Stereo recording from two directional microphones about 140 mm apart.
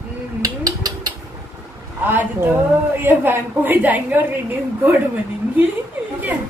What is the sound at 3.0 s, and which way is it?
A woman's voice, 15° right (ahead or behind).